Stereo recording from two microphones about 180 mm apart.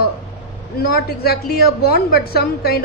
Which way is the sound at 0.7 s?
60° left (ahead or behind).